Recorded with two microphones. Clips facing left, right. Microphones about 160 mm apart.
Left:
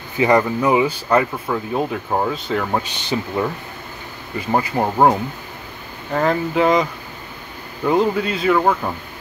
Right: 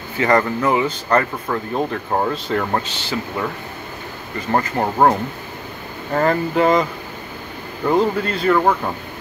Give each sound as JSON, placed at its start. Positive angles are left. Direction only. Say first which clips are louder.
{"t": 0.2, "sound": "speech", "louder": "left 1 dB", "side_deg": 10}
{"t": 2.9, "sound": "speech", "louder": "left 2 dB", "side_deg": 20}
{"t": 4.5, "sound": "speech", "louder": "even", "side_deg": 10}
{"t": 6.1, "sound": "speech", "louder": "right 1 dB", "side_deg": 0}